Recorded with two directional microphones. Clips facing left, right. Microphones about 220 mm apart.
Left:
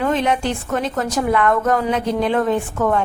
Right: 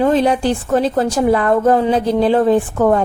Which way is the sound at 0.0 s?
35° right (ahead or behind).